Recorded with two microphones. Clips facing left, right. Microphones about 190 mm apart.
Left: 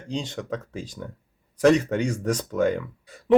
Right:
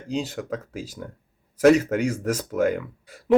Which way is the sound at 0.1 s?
5° right (ahead or behind).